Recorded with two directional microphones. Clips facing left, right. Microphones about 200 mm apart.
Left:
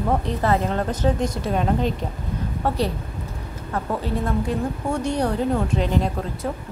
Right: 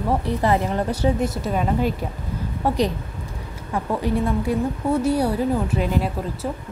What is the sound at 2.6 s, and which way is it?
Speech, 15° right (ahead or behind).